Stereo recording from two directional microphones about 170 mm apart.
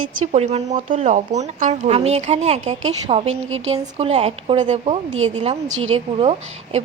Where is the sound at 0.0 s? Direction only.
40° right (ahead or behind).